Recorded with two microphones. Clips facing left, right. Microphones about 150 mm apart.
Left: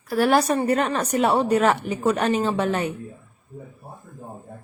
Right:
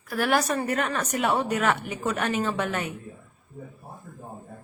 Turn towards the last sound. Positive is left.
turn(degrees=30)  # may be behind; listen again after turning